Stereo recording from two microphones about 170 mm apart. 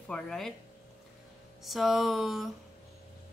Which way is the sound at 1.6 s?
Centre (ahead or behind).